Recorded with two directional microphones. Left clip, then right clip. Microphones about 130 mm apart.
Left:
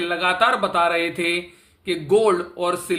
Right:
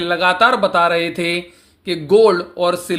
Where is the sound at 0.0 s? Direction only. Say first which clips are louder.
Right 5 dB; 45° right (ahead or behind).